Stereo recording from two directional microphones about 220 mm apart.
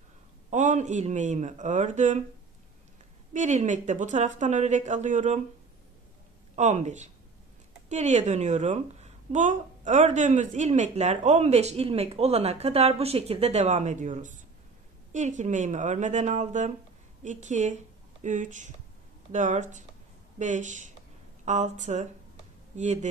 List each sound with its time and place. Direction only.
0.5 s a woman's voice: 35° right (ahead or behind)
3.3 s a woman's voice: 35° right (ahead or behind)
6.5 s a woman's voice: 30° right (ahead or behind)